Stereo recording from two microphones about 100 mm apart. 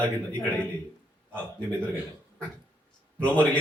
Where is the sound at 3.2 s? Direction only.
15° left (ahead or behind).